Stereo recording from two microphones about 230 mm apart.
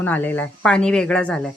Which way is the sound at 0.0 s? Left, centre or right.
Centre.